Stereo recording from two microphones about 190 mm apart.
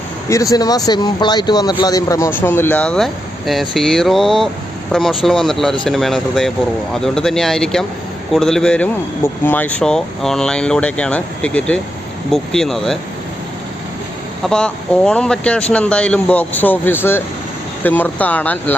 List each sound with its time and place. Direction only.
0.5 s speech: 20° left (ahead or behind); by 13.0 s centre (ahead or behind)
14.4 s speech: 5° left (ahead or behind)